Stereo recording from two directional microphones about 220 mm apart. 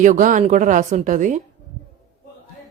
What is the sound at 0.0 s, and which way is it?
Speech, 35° right (ahead or behind).